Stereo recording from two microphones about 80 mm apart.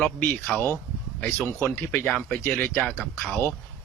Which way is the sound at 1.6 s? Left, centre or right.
Left.